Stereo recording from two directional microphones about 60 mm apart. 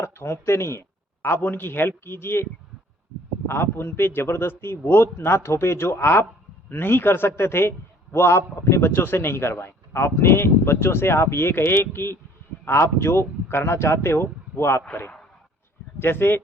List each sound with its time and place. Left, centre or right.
0.0 s a man's voice: left
16.0 s speech: left